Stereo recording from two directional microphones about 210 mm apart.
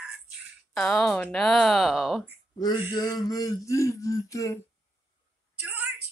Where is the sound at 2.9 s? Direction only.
20° left (ahead or behind).